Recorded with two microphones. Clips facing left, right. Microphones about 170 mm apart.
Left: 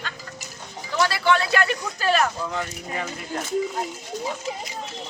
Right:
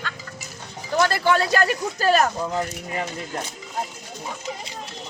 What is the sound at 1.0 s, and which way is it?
Speech, 45° right (ahead or behind).